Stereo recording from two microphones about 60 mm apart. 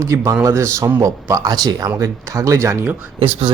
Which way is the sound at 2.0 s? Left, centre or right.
Right.